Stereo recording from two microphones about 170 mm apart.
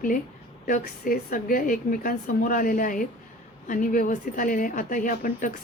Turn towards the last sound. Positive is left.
turn(degrees=50)  # may be behind; listen again after turning